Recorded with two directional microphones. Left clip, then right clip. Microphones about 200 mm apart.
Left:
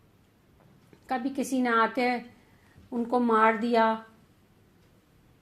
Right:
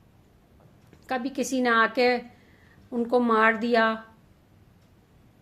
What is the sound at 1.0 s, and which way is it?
A woman's voice, 10° right (ahead or behind).